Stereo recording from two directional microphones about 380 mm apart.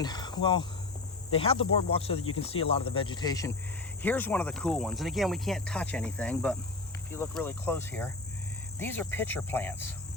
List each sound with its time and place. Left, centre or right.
0.0 s speech: centre